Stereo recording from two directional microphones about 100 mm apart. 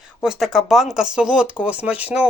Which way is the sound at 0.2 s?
5° right (ahead or behind).